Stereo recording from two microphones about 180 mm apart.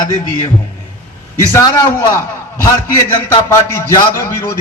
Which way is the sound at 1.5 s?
15° left (ahead or behind).